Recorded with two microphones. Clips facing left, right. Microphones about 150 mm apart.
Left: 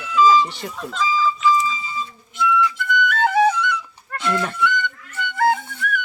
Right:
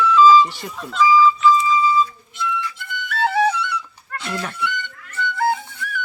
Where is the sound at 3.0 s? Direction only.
50° left (ahead or behind).